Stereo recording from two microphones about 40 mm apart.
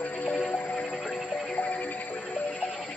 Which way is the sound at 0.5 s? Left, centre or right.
Left.